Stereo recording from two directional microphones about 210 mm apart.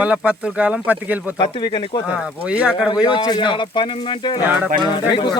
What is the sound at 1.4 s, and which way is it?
Speech, 20° left (ahead or behind).